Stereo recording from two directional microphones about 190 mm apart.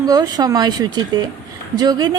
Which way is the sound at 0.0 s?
20° right (ahead or behind).